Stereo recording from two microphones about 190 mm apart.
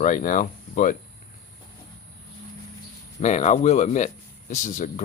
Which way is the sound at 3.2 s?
35° left (ahead or behind).